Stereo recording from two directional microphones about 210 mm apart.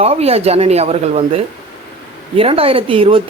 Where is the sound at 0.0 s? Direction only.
30° right (ahead or behind).